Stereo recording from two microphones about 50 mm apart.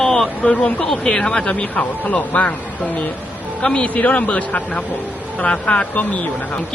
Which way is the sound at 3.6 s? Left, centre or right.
Centre.